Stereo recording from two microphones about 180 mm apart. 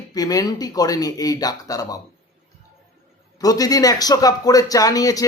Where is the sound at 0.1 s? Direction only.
20° left (ahead or behind).